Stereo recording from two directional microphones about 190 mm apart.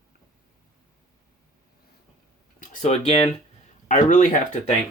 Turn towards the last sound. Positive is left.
turn(degrees=40)  # may be behind; listen again after turning